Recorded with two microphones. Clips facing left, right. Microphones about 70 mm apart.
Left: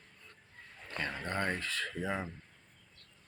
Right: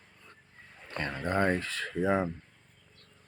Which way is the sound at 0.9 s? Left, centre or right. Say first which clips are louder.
Right 3 dB; centre.